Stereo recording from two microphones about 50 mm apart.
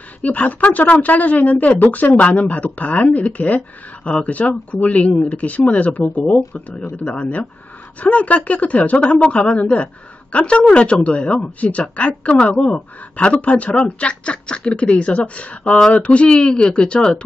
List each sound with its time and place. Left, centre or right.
0.2 s speech: left